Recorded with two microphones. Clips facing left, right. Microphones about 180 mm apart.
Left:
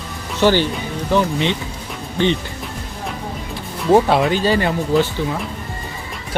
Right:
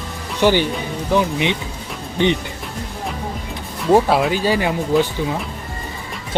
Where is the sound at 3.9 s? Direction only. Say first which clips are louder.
Left 1 dB; centre (ahead or behind).